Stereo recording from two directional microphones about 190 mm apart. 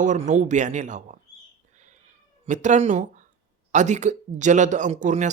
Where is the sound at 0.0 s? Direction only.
40° right (ahead or behind).